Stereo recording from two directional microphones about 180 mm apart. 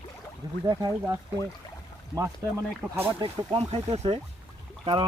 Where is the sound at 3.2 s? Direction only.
25° right (ahead or behind).